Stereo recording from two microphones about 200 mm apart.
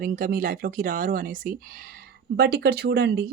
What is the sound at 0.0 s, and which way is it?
A woman's voice, 45° right (ahead or behind).